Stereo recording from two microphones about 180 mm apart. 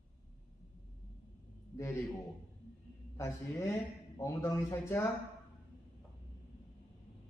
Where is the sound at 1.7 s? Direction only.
15° left (ahead or behind).